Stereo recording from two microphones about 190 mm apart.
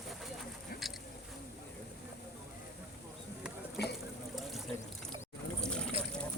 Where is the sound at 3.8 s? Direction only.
60° left (ahead or behind).